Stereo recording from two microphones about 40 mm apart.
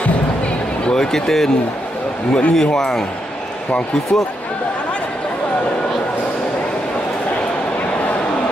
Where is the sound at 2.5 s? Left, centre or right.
Centre.